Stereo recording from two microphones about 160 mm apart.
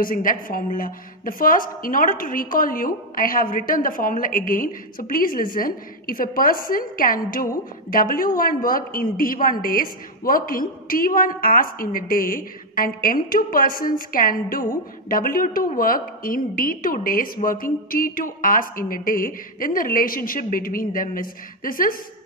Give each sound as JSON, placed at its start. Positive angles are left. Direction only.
{"t": 0.0, "sound": "a woman's voice", "side_deg": 60}